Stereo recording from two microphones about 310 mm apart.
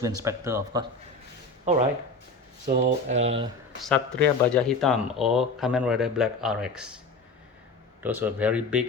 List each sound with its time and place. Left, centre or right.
0.0 s speech: centre
2.6 s speech: right
3.8 s speech: centre
8.0 s speech: centre